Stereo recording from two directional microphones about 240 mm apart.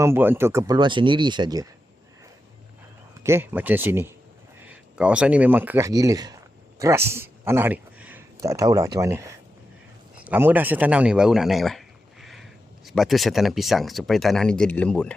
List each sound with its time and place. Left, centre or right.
0.0 s speech: centre
3.2 s a man's voice: centre